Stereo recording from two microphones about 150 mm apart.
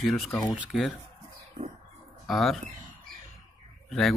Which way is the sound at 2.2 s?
Centre (ahead or behind).